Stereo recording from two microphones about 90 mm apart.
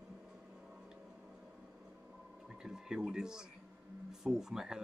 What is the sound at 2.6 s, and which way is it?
Speech, 5° right (ahead or behind).